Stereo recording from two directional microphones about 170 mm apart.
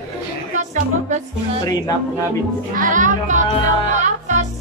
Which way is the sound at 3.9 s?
45° right (ahead or behind).